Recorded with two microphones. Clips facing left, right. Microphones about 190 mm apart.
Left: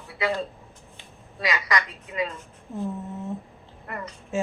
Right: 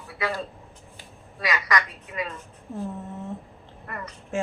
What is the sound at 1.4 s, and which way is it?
Speech, 25° left (ahead or behind).